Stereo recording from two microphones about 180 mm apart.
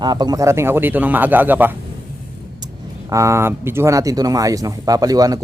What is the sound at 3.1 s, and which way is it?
A man's voice, 15° right (ahead or behind).